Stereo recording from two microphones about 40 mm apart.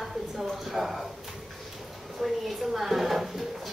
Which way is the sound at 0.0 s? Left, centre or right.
Centre.